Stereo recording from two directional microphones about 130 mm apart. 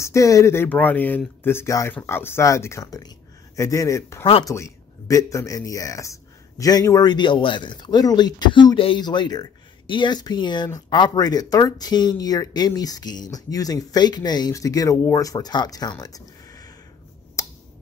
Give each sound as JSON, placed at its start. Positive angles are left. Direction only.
{"t": 0.0, "sound": "speech", "side_deg": 25}